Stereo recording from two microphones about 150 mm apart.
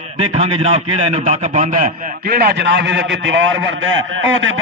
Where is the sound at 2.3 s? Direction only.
90° right.